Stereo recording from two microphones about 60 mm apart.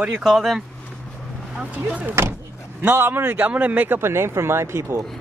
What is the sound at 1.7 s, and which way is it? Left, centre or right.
A man's voice, right.